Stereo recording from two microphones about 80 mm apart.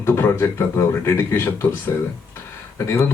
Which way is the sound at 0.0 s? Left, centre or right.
Left.